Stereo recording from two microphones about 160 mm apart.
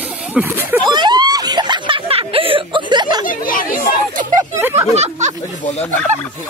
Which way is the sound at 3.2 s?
60° left (ahead or behind).